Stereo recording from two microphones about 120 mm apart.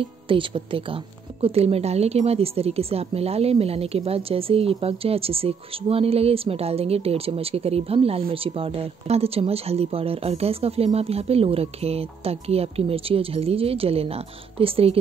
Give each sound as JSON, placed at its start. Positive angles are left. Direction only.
{"t": 0.0, "sound": "a woman's voice", "side_deg": -45}
{"t": 1.4, "sound": "a woman's voice", "side_deg": -55}